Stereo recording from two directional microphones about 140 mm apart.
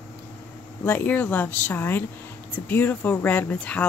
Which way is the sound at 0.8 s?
15° left (ahead or behind).